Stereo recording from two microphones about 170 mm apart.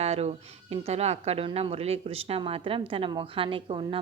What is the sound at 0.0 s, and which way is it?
A woman's voice, 40° right (ahead or behind).